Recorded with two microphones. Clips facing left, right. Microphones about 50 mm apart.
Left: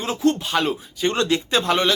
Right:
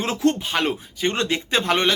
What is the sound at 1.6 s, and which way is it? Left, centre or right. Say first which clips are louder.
Speech: right 1 dB; right.